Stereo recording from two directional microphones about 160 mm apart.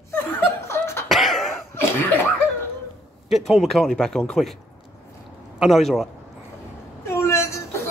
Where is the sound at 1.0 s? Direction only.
Centre (ahead or behind).